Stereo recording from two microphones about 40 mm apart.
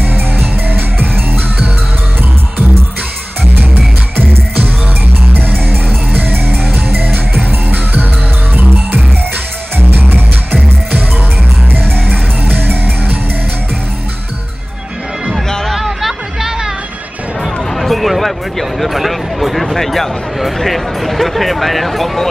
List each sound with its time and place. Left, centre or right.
0.0 s music: right
3.5 s music: right
6.1 s music: right
9.8 s music: right
11.7 s music: right
15.7 s music: centre
17.4 s a sound: centre